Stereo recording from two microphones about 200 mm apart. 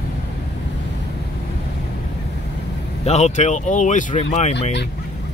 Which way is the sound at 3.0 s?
35° left (ahead or behind).